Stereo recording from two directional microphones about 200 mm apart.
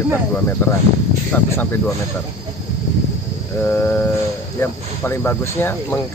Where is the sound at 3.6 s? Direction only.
10° left (ahead or behind).